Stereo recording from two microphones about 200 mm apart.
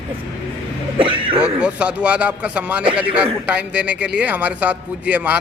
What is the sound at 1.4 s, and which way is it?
A man's voice, 5° right (ahead or behind).